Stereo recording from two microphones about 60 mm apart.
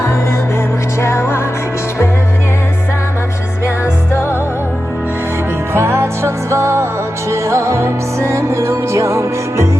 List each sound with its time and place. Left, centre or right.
1.0 s music: left
4.1 s music: left
5.7 s music: right